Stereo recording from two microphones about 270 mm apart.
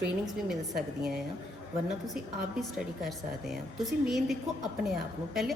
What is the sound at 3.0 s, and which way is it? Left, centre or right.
A woman's voice, centre.